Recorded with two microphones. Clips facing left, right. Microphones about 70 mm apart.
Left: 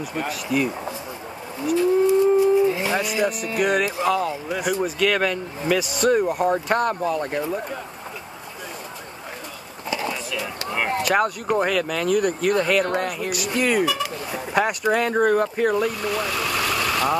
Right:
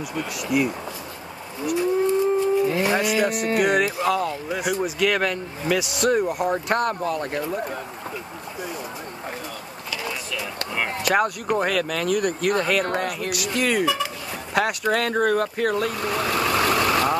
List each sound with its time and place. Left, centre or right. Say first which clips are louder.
0.3 s speech: right 1 dB; centre
2.0 s a sound: left 4 dB; centre
3.3 s speech: right 3 dB; right
3.8 s speech: left 1 dB; centre
9.8 s a sound: left 5 dB; left
11.1 s speech: right 2 dB; centre
16.0 s vehicle: right 1 dB; right